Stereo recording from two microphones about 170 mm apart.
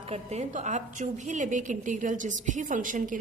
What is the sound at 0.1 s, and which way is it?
A woman's voice, 40° right (ahead or behind).